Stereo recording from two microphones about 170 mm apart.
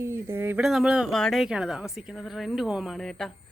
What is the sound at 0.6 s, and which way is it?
A woman's voice, 5° right (ahead or behind).